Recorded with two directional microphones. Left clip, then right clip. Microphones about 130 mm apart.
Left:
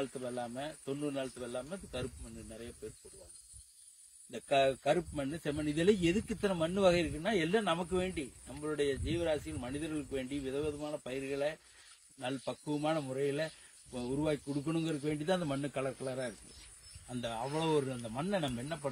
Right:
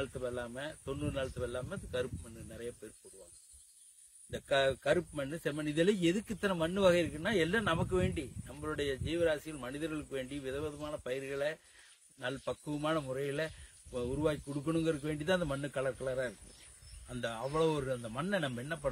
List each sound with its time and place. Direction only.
0.0 s speech: 45° right (ahead or behind)
4.3 s speech: 40° right (ahead or behind)